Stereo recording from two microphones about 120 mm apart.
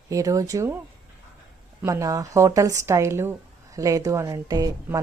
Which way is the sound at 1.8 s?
30° right (ahead or behind).